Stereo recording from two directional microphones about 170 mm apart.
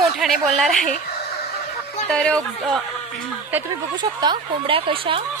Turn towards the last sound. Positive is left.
turn(degrees=-30)  # may be behind; listen again after turning